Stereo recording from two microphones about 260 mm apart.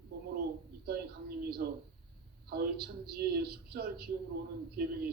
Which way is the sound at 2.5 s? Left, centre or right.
Right.